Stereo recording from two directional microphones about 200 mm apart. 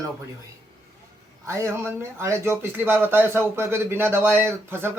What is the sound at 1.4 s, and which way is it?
Speech, 15° right (ahead or behind).